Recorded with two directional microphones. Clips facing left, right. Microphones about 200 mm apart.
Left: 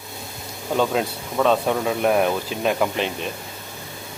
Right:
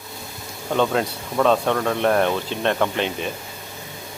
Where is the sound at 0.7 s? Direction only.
5° left (ahead or behind).